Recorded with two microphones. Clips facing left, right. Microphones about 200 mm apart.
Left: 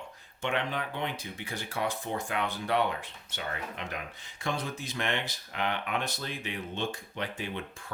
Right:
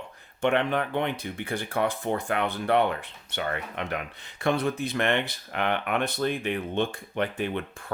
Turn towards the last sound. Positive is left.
turn(degrees=-55)  # may be behind; listen again after turning